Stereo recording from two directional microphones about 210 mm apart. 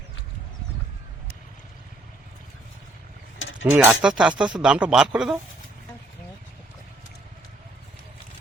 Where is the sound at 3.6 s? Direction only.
10° right (ahead or behind).